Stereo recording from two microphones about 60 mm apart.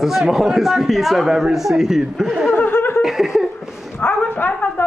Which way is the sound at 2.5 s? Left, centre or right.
Left.